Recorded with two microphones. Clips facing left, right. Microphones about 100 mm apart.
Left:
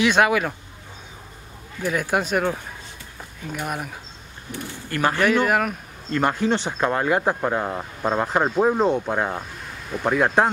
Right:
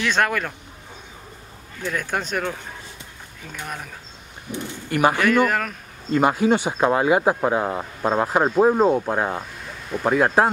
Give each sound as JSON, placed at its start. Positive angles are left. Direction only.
{"t": 0.0, "sound": "speech", "side_deg": 10}
{"t": 1.8, "sound": "speech", "side_deg": 10}
{"t": 4.5, "sound": "speech", "side_deg": -15}
{"t": 5.5, "sound": "speech", "side_deg": 10}
{"t": 6.1, "sound": "speech", "side_deg": -10}